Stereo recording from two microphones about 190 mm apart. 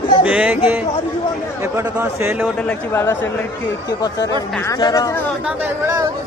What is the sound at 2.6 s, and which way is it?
A man's voice, 10° left (ahead or behind).